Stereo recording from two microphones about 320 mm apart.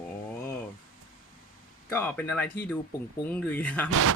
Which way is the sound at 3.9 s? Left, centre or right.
Right.